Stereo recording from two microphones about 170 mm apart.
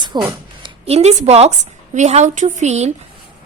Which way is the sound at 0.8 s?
40° right (ahead or behind).